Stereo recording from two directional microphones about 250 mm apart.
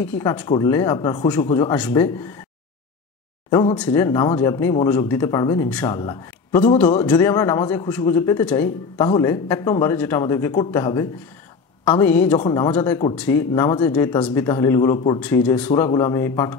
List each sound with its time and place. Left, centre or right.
0.0 s speech: centre
3.4 s speech: centre
5.9 s speech: centre
15.1 s speech: centre